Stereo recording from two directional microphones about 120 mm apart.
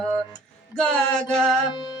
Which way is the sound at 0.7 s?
5° left (ahead or behind).